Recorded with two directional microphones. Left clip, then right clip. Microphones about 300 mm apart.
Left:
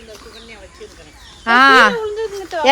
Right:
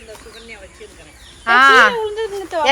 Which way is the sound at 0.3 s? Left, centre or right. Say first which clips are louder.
Right 1 dB; left.